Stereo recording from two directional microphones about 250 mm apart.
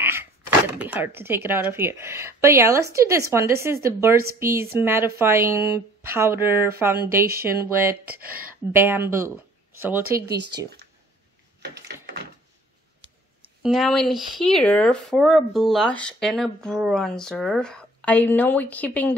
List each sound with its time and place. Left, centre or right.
0.0 s speech: centre
11.6 s a sound: right
13.6 s speech: centre